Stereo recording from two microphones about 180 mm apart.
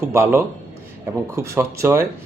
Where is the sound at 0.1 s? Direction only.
15° right (ahead or behind).